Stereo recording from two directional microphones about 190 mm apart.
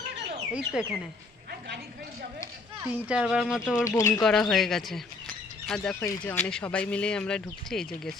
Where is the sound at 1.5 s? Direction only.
55° right (ahead or behind).